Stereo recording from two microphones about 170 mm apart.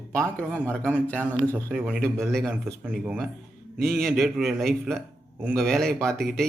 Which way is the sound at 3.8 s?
Centre (ahead or behind).